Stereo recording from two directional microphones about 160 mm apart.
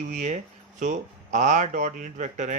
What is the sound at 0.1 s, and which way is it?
Speech, 45° right (ahead or behind).